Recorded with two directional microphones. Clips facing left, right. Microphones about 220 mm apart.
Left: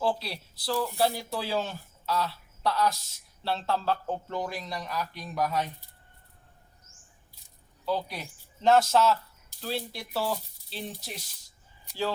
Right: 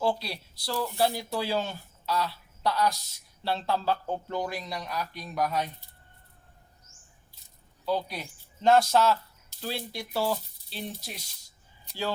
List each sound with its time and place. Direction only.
0.0 s speech: 5° left (ahead or behind)
7.9 s speech: centre (ahead or behind)